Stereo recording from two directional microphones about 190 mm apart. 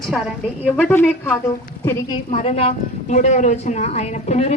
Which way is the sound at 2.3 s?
35° left (ahead or behind).